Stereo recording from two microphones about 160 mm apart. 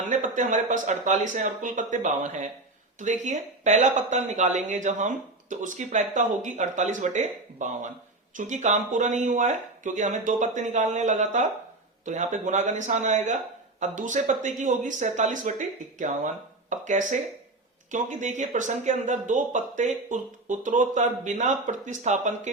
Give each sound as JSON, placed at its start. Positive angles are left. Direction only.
{"t": 0.1, "sound": "speech", "side_deg": -50}